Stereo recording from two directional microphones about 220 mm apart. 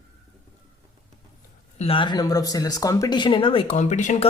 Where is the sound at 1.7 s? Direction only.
25° left (ahead or behind).